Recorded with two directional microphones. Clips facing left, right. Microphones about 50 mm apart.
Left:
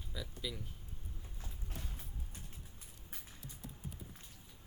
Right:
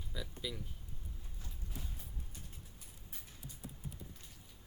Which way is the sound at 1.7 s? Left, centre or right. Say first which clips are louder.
Even; left.